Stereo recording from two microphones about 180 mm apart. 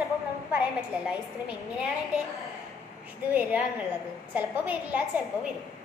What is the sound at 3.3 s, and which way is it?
A woman's voice, 10° right (ahead or behind).